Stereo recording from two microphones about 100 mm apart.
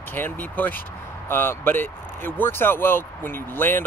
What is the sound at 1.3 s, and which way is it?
Speech, 20° left (ahead or behind).